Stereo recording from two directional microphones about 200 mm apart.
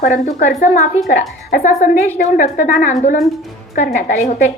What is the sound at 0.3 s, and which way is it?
A woman's voice, 40° left (ahead or behind).